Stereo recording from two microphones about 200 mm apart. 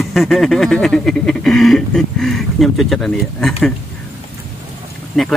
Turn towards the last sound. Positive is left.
turn(degrees=0)  # may be behind; listen again after turning